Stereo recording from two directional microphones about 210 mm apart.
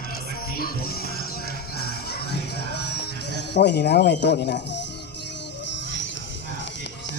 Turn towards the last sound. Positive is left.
turn(degrees=60)  # may be behind; listen again after turning